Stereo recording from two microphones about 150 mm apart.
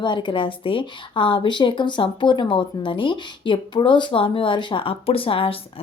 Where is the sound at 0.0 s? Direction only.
30° left (ahead or behind).